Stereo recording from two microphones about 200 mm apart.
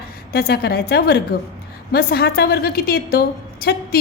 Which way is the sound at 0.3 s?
50° left (ahead or behind).